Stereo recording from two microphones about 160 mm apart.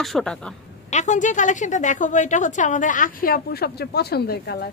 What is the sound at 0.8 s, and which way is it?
A woman's voice, 50° left (ahead or behind).